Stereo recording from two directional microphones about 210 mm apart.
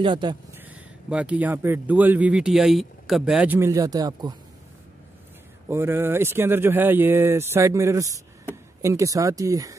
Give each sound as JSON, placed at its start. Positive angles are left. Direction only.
{"t": 0.0, "sound": "speech", "side_deg": -20}
{"t": 0.6, "sound": "a man's voice", "side_deg": -5}
{"t": 5.7, "sound": "a man's voice", "side_deg": -10}